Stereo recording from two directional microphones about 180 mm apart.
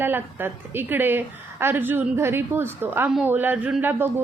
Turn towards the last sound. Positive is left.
turn(degrees=-10)  # may be behind; listen again after turning